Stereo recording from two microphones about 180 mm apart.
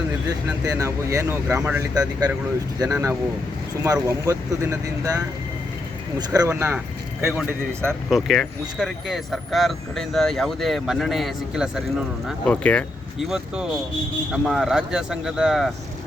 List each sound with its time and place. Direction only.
0.3 s speech: 20° right (ahead or behind)
7.9 s speech: centre (ahead or behind)